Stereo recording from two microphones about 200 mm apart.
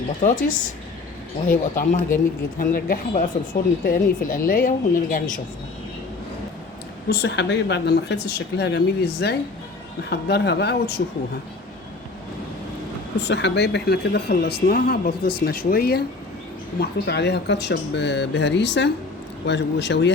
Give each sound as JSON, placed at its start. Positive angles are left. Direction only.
{"t": 0.2, "sound": "speech", "side_deg": 40}
{"t": 7.1, "sound": "speech", "side_deg": 55}
{"t": 13.1, "sound": "speech", "side_deg": 60}